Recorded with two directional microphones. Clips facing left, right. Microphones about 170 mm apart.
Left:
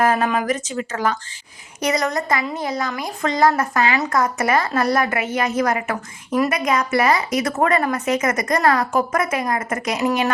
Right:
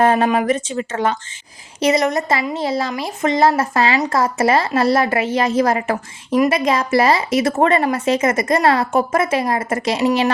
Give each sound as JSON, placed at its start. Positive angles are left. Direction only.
{"t": 0.0, "sound": "a woman's voice", "side_deg": -30}